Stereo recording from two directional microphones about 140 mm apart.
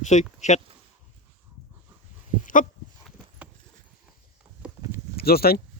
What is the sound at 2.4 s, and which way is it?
Dog, 65° left (ahead or behind).